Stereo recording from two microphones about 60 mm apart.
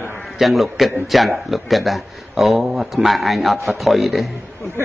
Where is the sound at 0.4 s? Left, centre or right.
Centre.